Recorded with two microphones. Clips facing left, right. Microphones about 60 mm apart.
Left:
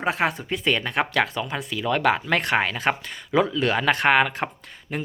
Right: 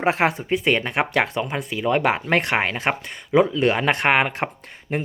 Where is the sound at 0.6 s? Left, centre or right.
Right.